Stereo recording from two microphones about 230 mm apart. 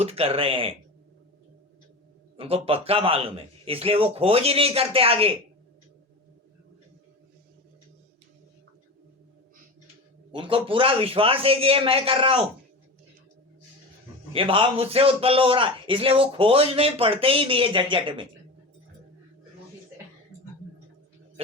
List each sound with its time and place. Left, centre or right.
0.0 s a man's voice: right
2.3 s a man's voice: right
10.3 s a man's voice: right
14.3 s a man's voice: right